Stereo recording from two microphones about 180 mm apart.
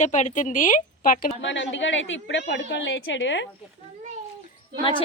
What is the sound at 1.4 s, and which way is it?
A woman's voice, 90° left.